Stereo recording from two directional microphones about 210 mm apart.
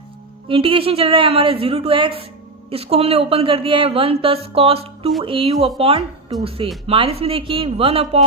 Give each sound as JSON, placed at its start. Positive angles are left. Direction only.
{"t": 0.4, "sound": "a woman's voice", "side_deg": -25}